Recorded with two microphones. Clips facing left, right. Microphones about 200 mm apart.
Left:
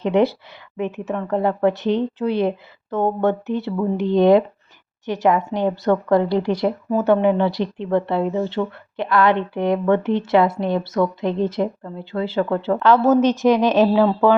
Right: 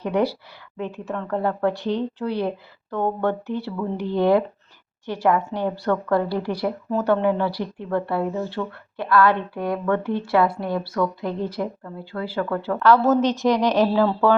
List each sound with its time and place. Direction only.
0.0 s speech: 25° left (ahead or behind)